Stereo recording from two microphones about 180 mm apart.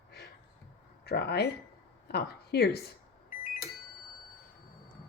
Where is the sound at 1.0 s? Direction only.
65° left (ahead or behind).